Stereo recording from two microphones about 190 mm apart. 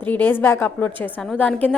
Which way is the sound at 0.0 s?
10° left (ahead or behind).